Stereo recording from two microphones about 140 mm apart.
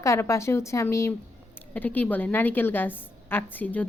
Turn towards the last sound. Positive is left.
turn(degrees=10)  # may be behind; listen again after turning